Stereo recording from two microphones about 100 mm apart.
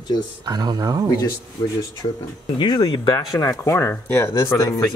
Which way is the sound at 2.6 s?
50° left (ahead or behind).